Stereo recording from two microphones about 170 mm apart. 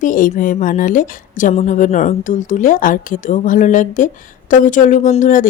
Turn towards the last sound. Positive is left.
turn(degrees=50)  # may be behind; listen again after turning